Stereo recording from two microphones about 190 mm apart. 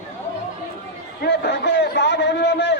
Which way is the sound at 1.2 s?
60° left (ahead or behind).